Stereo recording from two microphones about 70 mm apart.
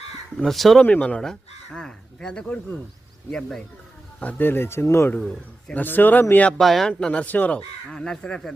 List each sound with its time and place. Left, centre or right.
0.3 s speech: centre
0.8 s speech: centre
1.2 s speech: centre
4.2 s speech: left
5.2 s a man's voice: centre
5.7 s speech: left
6.6 s speech: centre